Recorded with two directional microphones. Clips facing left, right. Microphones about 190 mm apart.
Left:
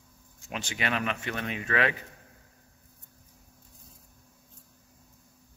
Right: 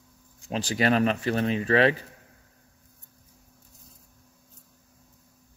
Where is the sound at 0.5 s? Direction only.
35° right (ahead or behind).